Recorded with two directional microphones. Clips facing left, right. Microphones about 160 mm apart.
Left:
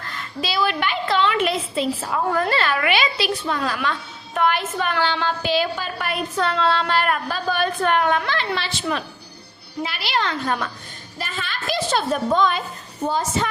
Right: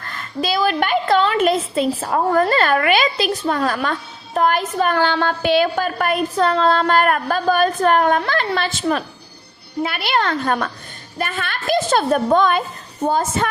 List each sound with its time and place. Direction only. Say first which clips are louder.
0.1 s a woman's voice: right 6 dB; 50° right (ahead or behind)